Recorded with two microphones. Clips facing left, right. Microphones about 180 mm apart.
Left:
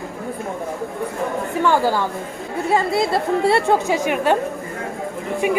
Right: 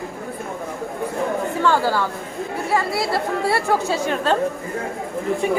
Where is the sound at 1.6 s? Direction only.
15° left (ahead or behind).